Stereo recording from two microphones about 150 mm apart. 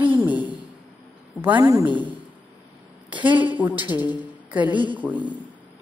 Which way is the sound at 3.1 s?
30° right (ahead or behind).